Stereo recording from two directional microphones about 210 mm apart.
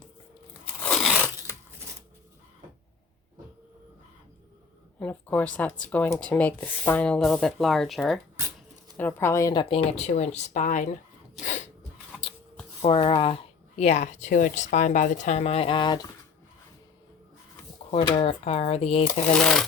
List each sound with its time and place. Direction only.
0.8 s crunch: centre (ahead or behind)
4.9 s speech: 5° left (ahead or behind); by 10.8 s 35° left (ahead or behind)
11.3 s sneeze: 35° left (ahead or behind)
12.8 s speech: 25° left (ahead or behind)
17.9 s speech: 25° left (ahead or behind)
19.3 s speech: 5° left (ahead or behind)